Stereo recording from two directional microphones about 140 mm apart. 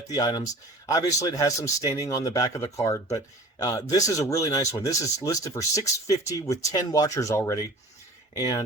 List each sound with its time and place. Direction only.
0.1 s speech: 30° left (ahead or behind)